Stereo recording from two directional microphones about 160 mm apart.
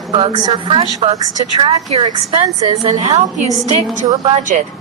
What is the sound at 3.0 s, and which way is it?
Speech, 45° right (ahead or behind).